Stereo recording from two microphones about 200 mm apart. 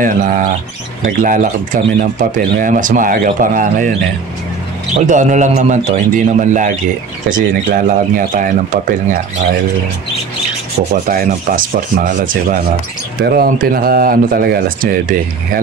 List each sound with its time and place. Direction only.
0.0 s speech: 45° right (ahead or behind)
4.9 s speech: 40° right (ahead or behind)
11.1 s speech: 45° right (ahead or behind)